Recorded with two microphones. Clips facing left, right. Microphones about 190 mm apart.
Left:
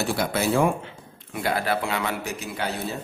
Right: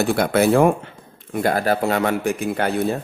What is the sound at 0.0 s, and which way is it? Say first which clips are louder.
Speech: right 7 dB; 55° right (ahead or behind).